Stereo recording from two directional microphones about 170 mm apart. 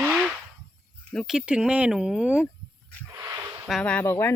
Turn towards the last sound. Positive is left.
turn(degrees=15)  # may be behind; listen again after turning